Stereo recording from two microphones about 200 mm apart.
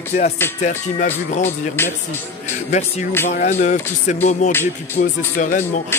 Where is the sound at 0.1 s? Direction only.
30° left (ahead or behind).